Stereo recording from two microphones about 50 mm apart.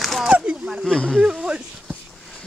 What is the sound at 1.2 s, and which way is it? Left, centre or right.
Speech, centre.